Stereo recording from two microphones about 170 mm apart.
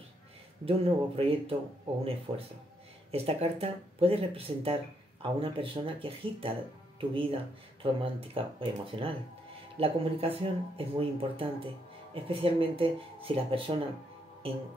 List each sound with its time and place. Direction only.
0.7 s speech: 35° right (ahead or behind)